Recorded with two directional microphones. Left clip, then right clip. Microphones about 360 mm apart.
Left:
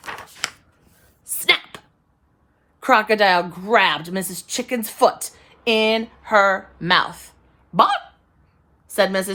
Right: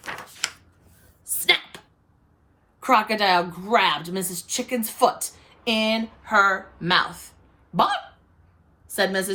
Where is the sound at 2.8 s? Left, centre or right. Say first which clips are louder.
Left 4 dB; left.